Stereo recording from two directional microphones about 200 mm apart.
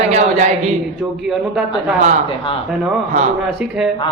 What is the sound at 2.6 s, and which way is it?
Speech, centre (ahead or behind).